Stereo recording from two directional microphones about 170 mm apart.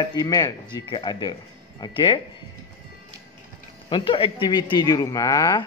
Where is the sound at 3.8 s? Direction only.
30° left (ahead or behind).